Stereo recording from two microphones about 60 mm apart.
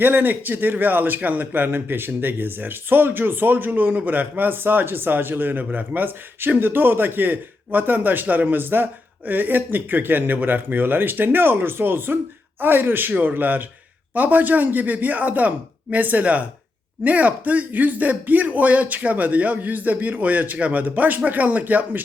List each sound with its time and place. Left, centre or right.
0.0 s a man's voice: right